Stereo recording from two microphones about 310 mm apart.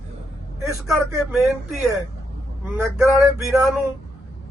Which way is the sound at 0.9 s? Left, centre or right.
Centre.